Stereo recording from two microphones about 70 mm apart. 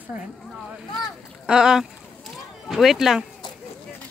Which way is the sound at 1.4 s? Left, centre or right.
Centre.